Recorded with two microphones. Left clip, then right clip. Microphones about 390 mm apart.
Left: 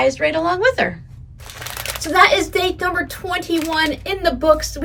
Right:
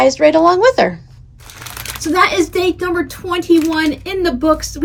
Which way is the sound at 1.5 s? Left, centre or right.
Centre.